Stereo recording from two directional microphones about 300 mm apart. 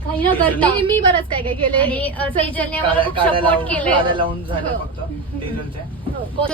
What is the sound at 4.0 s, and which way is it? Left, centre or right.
Speech, centre.